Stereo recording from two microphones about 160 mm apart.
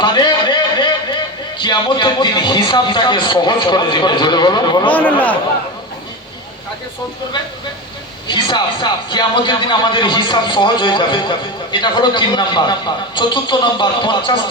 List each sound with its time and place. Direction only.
0.0 s a sound: 30° left (ahead or behind)
1.5 s speech: 30° left (ahead or behind)
4.9 s speech: 10° left (ahead or behind)
8.3 s speech: 30° left (ahead or behind)